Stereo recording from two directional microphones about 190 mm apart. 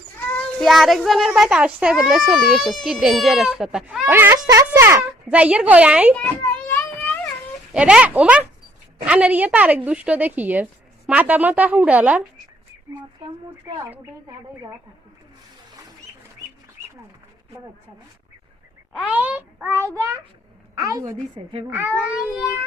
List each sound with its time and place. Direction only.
0.3 s a child's voice: 5° left (ahead or behind)
6.7 s a sound: 10° left (ahead or behind)
7.7 s a child's voice: 5° right (ahead or behind)
13.9 s a woman's voice: 15° right (ahead or behind)
18.9 s a woman's voice: 5° right (ahead or behind)
21.7 s a woman's voice: 10° right (ahead or behind)